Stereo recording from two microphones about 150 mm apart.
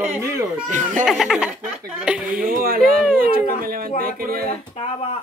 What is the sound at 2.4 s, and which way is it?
Speech, 75° right (ahead or behind).